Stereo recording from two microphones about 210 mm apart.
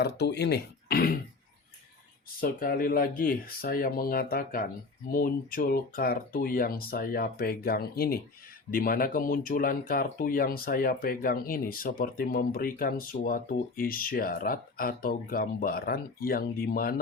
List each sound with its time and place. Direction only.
0.0 s speech: 50° left (ahead or behind)
2.4 s speech: 45° left (ahead or behind)